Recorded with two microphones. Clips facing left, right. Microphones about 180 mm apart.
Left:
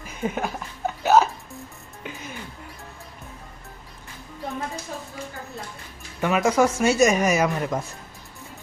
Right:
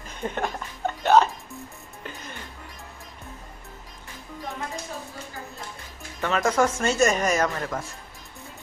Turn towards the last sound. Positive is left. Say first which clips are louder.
# left 3 dB
turn(degrees=15)  # may be behind; listen again after turning